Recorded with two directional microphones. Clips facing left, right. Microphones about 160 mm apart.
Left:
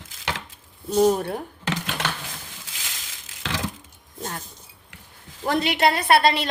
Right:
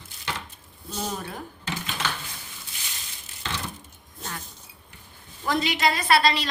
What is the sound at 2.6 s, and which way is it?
Crushing, 90° left.